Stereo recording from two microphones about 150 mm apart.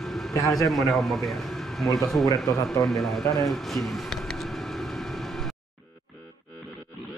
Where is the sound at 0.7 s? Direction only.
Centre (ahead or behind).